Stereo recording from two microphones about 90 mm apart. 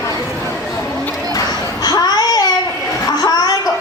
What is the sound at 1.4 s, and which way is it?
Babbling, 50° left (ahead or behind).